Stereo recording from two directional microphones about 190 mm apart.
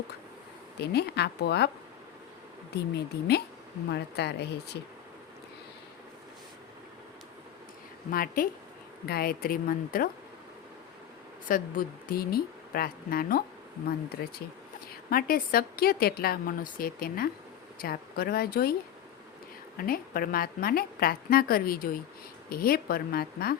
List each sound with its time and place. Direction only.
0.8 s a woman's voice: 60° left (ahead or behind)
2.7 s a woman's voice: 60° left (ahead or behind)
8.1 s a woman's voice: 50° left (ahead or behind)
11.4 s a woman's voice: 45° left (ahead or behind)
19.7 s a woman's voice: 50° left (ahead or behind)